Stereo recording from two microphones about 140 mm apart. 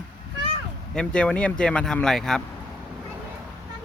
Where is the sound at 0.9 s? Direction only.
5° left (ahead or behind).